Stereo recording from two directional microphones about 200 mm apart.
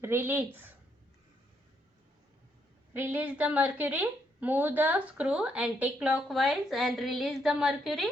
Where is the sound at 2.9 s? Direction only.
10° right (ahead or behind).